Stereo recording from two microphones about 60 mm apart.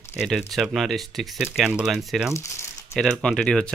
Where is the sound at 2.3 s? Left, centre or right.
Left.